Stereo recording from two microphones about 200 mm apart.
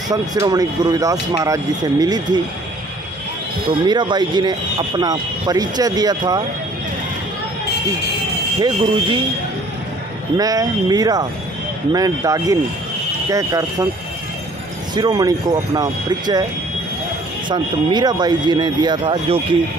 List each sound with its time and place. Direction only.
0.1 s speech: 20° right (ahead or behind)
3.8 s speech: 20° right (ahead or behind)
8.5 s speech: 25° right (ahead or behind)
10.3 s speech: 20° right (ahead or behind)
15.0 s speech: 20° right (ahead or behind)
17.5 s speech: 20° right (ahead or behind)